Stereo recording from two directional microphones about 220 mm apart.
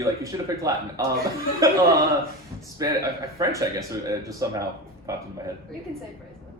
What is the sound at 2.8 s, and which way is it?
Speech, 15° right (ahead or behind).